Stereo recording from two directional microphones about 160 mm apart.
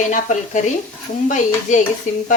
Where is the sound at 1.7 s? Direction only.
50° left (ahead or behind).